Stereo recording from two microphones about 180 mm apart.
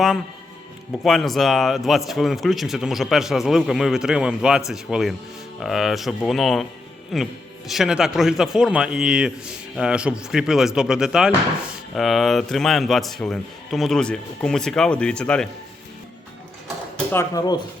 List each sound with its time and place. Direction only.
1.0 s a man's voice: centre (ahead or behind)
17.1 s speech: 15° left (ahead or behind)